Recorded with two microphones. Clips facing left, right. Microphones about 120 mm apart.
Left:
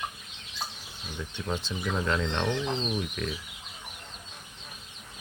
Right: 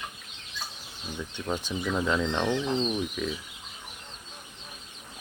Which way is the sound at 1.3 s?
10° right (ahead or behind).